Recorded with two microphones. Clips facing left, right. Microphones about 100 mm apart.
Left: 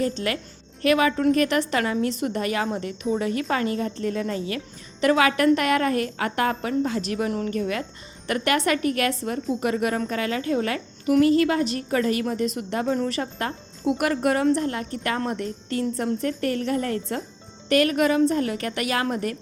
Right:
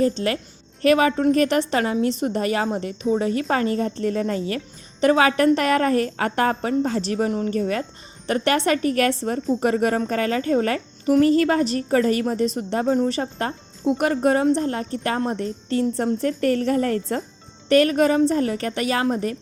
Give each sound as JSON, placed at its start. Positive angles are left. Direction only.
{"t": 0.8, "sound": "speech", "side_deg": -35}